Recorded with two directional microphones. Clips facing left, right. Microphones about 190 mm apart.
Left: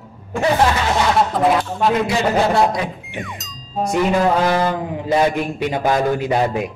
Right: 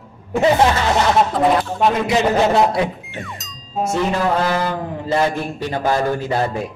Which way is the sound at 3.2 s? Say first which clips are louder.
Left 1 dB; centre (ahead or behind).